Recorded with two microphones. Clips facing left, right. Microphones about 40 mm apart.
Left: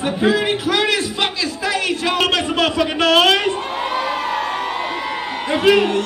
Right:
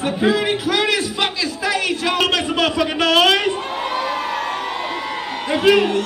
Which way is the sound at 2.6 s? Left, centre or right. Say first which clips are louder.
Left 1 dB; left.